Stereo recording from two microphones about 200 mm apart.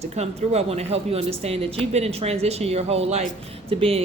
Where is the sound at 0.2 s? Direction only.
30° right (ahead or behind).